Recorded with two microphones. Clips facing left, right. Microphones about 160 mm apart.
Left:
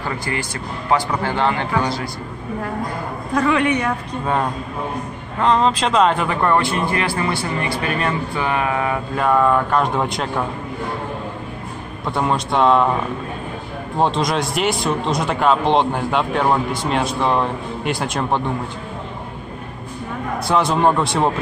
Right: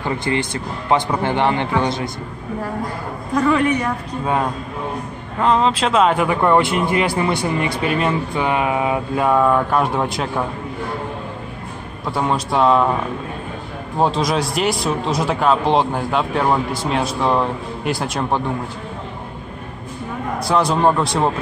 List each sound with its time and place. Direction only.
0.0 s speech: 25° right (ahead or behind)
3.8 s a man's voice: 10° right (ahead or behind)
12.1 s speech: centre (ahead or behind)
13.9 s speech: centre (ahead or behind)
20.3 s speech: centre (ahead or behind)